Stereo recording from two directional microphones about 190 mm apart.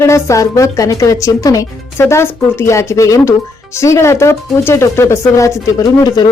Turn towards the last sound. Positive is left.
turn(degrees=20)  # may be behind; listen again after turning